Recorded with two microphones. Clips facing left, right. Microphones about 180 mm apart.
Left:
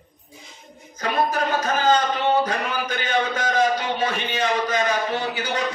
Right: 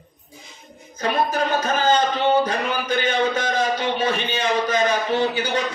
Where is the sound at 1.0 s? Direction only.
30° right (ahead or behind).